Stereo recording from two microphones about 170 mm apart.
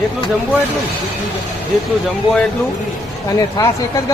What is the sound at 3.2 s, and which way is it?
Speech, 20° left (ahead or behind).